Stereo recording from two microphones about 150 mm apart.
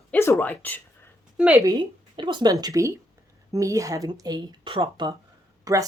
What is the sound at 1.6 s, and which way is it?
Speech, 30° right (ahead or behind).